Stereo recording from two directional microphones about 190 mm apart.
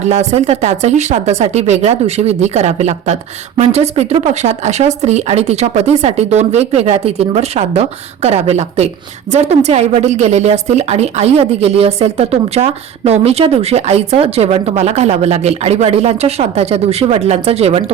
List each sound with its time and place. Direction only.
0.0 s a woman's voice: 35° right (ahead or behind)